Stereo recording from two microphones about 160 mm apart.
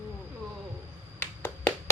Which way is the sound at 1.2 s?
15° left (ahead or behind).